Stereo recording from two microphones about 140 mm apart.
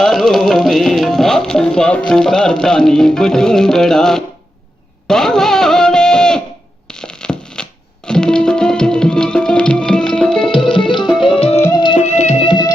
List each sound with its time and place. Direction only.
0.0 s music: centre (ahead or behind)
5.0 s a sound: 5° left (ahead or behind)
6.8 s music: 5° left (ahead or behind)
10.5 s music: 35° left (ahead or behind)
11.7 s music: 35° left (ahead or behind)
11.9 s music: 55° left (ahead or behind)
12.4 s music: 35° left (ahead or behind)